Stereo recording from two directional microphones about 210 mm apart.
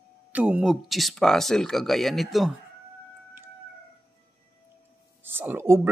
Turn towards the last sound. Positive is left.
turn(degrees=-10)  # may be behind; listen again after turning